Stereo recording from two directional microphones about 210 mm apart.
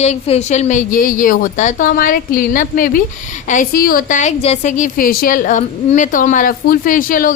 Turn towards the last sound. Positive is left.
turn(degrees=40)  # may be behind; listen again after turning